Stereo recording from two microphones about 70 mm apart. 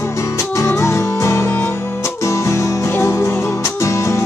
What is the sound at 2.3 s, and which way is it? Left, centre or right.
Music, left.